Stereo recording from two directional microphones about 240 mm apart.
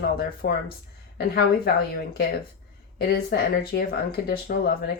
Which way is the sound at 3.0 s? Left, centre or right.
Left.